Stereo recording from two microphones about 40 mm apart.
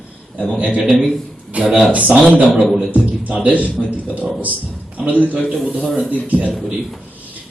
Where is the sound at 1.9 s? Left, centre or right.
Right.